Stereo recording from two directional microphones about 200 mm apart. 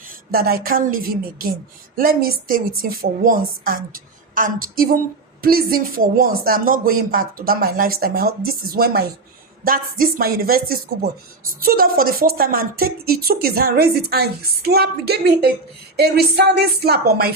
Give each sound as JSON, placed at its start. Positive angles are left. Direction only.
{"t": 0.3, "sound": "speech", "side_deg": -50}